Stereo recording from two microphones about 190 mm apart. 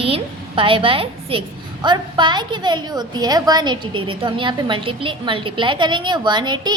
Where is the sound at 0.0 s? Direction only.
30° right (ahead or behind).